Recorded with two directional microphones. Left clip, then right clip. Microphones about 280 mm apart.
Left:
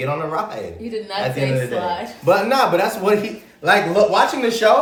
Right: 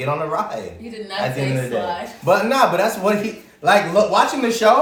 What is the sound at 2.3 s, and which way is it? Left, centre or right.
A man's voice, centre.